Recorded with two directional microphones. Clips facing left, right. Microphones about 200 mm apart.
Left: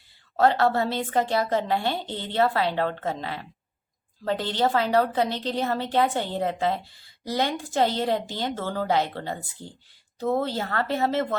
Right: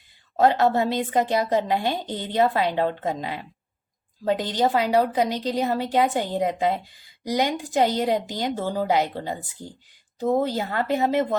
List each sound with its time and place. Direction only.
0.3 s a woman's voice: 15° right (ahead or behind)